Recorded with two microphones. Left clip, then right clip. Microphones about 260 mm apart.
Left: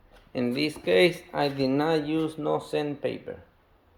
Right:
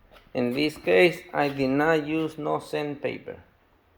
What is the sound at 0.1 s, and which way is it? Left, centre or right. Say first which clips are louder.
Speech: right 2 dB; centre.